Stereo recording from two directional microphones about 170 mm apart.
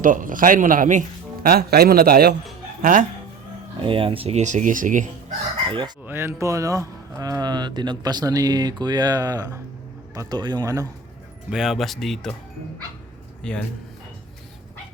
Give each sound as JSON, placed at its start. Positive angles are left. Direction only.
{"t": 0.0, "sound": "speech", "side_deg": -50}
{"t": 1.5, "sound": "a man's voice", "side_deg": -65}
{"t": 2.8, "sound": "speech", "side_deg": -50}
{"t": 3.8, "sound": "speech", "side_deg": -30}
{"t": 5.6, "sound": "chicken", "side_deg": -30}
{"t": 6.1, "sound": "speech", "side_deg": -15}
{"t": 11.5, "sound": "speech", "side_deg": -5}
{"t": 13.4, "sound": "speech", "side_deg": 5}